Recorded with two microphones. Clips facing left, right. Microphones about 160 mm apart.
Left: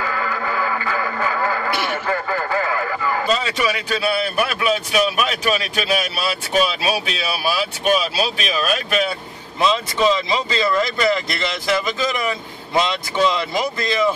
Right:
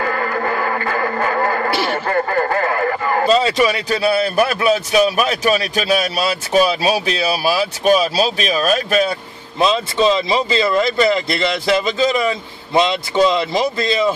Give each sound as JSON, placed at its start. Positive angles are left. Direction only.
{"t": 0.0, "sound": "music", "side_deg": -50}
{"t": 1.7, "sound": "radio", "side_deg": -30}
{"t": 2.0, "sound": "radio", "side_deg": -50}
{"t": 3.3, "sound": "a man's voice", "side_deg": -35}
{"t": 9.6, "sound": "speech", "side_deg": -25}